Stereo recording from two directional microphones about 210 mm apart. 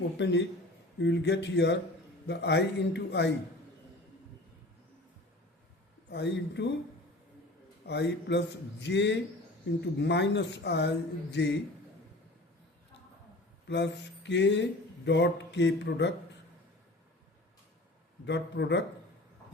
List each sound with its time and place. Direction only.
0.2 s speech: 55° left (ahead or behind)
6.1 s speech: 55° left (ahead or behind)
7.9 s speech: 55° left (ahead or behind)
13.7 s speech: 55° left (ahead or behind)
18.3 s speech: 55° left (ahead or behind)